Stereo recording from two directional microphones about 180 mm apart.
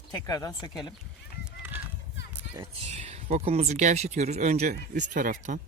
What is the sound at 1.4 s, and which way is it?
Fowl, 10° right (ahead or behind).